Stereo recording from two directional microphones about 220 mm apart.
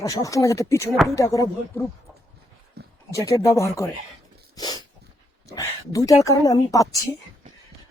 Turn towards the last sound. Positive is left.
turn(degrees=15)  # may be behind; listen again after turning